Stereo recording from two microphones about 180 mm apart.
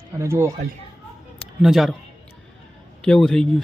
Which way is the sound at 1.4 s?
Centre (ahead or behind).